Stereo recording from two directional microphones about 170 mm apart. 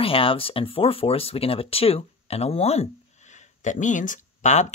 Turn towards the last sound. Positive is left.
turn(degrees=45)  # may be behind; listen again after turning